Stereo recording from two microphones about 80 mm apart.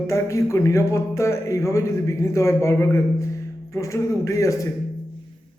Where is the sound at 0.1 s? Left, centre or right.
Left.